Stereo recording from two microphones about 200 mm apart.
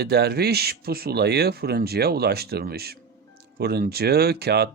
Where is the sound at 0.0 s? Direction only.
55° right (ahead or behind).